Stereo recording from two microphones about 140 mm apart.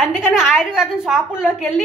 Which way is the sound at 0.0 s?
Centre (ahead or behind).